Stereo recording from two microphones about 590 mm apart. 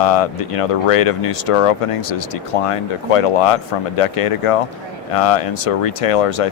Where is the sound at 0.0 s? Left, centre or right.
Left.